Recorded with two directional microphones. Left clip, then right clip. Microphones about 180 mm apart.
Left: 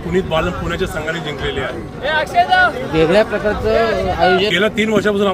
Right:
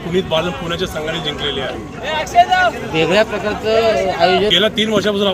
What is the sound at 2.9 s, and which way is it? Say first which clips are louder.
Speech: left 2 dB; 65° left (ahead or behind).